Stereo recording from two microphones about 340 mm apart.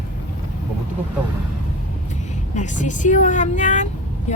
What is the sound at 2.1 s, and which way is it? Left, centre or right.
Speech, left.